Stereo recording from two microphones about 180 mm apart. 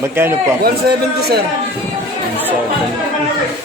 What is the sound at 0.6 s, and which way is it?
Speech, 60° right (ahead or behind).